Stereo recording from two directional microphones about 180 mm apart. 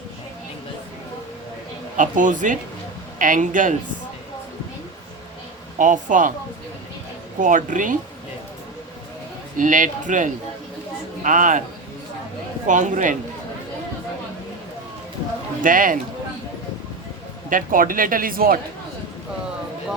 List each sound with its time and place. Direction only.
2.0 s speech: 45° right (ahead or behind)
5.8 s speech: 45° right (ahead or behind)
7.3 s speech: 45° right (ahead or behind)
9.6 s speech: 45° right (ahead or behind)
12.6 s speech: 45° right (ahead or behind)
15.6 s speech: 50° right (ahead or behind)
17.5 s speech: 50° right (ahead or behind)